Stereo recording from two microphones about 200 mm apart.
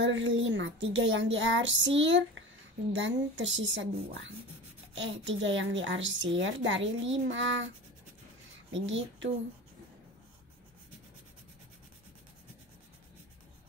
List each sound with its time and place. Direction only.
0.0 s a woman's voice: 70° right (ahead or behind)
8.7 s a woman's voice: 70° right (ahead or behind)